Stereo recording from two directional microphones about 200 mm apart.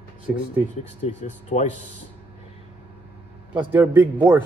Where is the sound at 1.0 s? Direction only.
35° left (ahead or behind).